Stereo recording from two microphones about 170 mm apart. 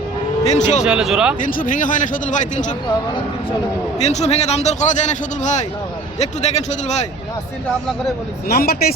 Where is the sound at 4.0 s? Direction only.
40° left (ahead or behind).